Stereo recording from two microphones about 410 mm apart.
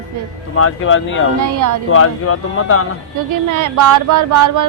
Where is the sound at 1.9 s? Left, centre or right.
Left.